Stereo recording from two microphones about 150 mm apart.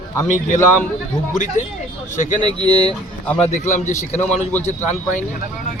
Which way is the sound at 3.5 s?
55° left (ahead or behind).